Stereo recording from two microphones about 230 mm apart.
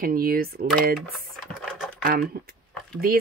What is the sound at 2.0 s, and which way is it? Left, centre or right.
Speech, right.